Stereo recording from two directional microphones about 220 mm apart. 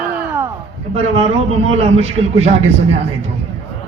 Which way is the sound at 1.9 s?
30° right (ahead or behind).